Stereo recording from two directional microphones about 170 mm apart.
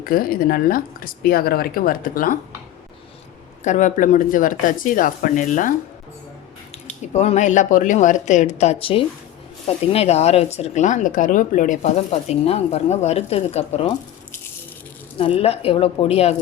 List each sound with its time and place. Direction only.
0.0 s a woman's voice: 60° left (ahead or behind)
3.6 s speech: 45° left (ahead or behind)
7.1 s speech: 40° left (ahead or behind)
15.2 s speech: 35° left (ahead or behind)